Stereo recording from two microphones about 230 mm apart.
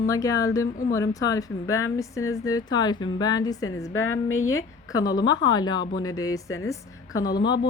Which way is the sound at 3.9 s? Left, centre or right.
Left.